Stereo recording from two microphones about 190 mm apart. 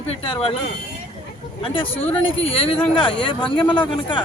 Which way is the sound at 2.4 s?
30° left (ahead or behind).